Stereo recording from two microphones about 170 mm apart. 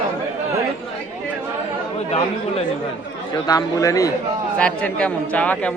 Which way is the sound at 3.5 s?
20° left (ahead or behind).